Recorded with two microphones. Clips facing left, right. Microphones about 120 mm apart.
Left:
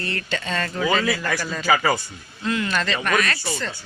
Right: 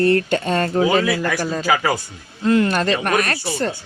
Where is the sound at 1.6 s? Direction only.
10° right (ahead or behind).